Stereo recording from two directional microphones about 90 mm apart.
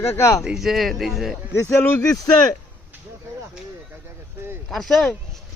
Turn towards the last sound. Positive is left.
turn(degrees=0)  # may be behind; listen again after turning